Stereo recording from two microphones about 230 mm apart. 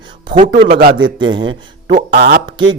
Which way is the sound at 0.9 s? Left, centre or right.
Centre.